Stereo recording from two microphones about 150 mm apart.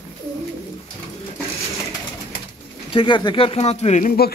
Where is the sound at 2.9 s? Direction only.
35° left (ahead or behind).